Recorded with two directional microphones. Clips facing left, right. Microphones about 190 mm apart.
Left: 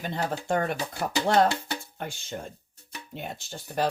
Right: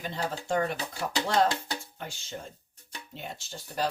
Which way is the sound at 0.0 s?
55° left (ahead or behind).